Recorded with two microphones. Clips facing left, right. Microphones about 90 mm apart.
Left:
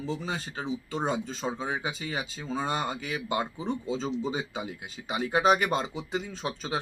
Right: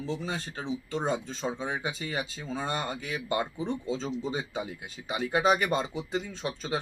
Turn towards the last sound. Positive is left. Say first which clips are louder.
# even
turn(degrees=5)  # may be behind; listen again after turning